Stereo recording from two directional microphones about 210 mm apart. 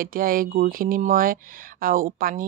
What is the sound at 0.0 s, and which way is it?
Speech, 40° right (ahead or behind).